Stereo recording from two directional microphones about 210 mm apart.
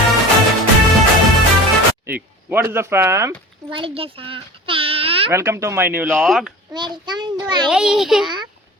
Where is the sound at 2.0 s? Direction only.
10° right (ahead or behind).